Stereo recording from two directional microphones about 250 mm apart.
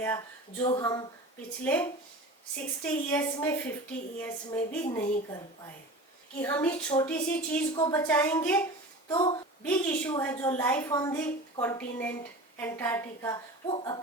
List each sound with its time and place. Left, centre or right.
0.0 s a woman's voice: centre
6.4 s a woman's voice: centre